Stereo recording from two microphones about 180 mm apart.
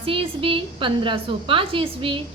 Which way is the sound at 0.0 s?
30° right (ahead or behind).